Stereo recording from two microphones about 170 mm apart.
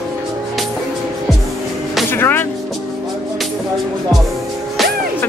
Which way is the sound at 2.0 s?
15° left (ahead or behind).